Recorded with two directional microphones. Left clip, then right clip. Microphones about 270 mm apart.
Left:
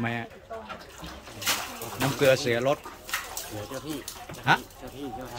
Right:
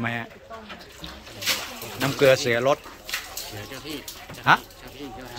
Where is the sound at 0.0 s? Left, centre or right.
Centre.